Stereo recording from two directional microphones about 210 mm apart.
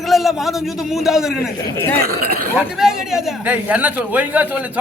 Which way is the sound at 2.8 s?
Centre (ahead or behind).